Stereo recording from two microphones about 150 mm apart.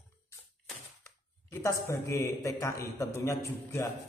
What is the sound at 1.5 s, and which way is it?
A man's voice, 20° left (ahead or behind).